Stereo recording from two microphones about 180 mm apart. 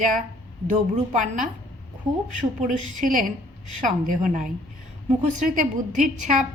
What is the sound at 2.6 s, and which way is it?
A woman's voice, 45° right (ahead or behind).